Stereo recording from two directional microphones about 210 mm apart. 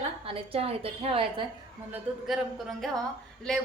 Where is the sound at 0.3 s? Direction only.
25° right (ahead or behind).